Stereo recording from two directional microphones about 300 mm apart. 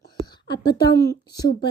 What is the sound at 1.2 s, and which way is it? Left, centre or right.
Speech, centre.